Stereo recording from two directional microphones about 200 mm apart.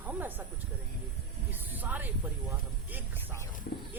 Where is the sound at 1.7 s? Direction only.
10° right (ahead or behind).